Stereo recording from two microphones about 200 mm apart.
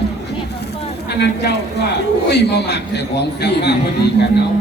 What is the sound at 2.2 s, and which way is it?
A man's voice, 55° left (ahead or behind).